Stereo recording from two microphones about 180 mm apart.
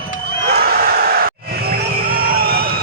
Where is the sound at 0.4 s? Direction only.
60° right (ahead or behind).